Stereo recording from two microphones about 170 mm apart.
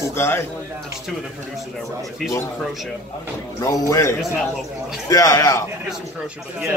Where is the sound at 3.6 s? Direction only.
20° left (ahead or behind).